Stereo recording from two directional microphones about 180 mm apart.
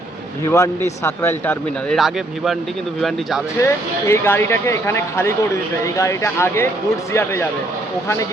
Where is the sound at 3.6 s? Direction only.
15° left (ahead or behind).